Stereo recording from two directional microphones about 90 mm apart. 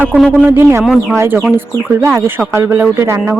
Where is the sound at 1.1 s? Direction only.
30° right (ahead or behind).